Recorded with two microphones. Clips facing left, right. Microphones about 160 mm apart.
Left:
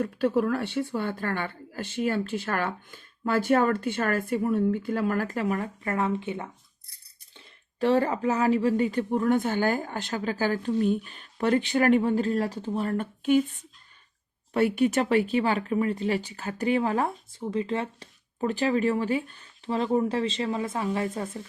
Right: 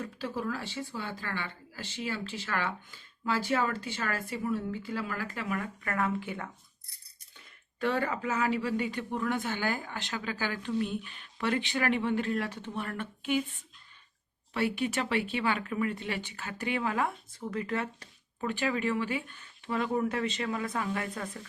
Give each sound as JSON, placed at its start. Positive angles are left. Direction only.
{"t": 0.0, "sound": "speech", "side_deg": 60}
{"t": 7.3, "sound": "speech", "side_deg": 35}
{"t": 14.5, "sound": "speech", "side_deg": 45}
{"t": 17.3, "sound": "speech", "side_deg": 25}
{"t": 18.4, "sound": "speech", "side_deg": 40}